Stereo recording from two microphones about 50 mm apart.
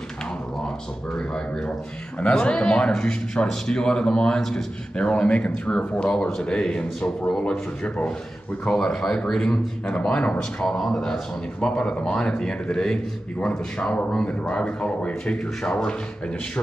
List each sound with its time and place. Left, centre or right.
1.1 s speech: centre
4.9 s speech: centre
8.7 s speech: centre
10.8 s speech: centre